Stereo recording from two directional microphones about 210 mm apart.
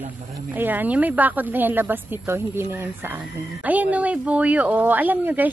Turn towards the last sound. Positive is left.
turn(degrees=-10)  # may be behind; listen again after turning